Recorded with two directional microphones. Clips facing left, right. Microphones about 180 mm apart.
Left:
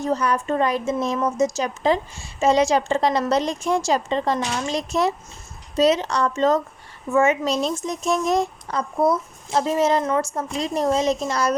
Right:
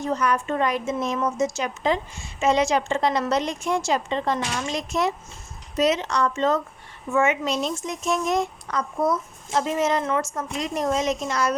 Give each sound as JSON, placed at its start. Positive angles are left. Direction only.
{"t": 0.0, "sound": "a woman's voice", "side_deg": 35}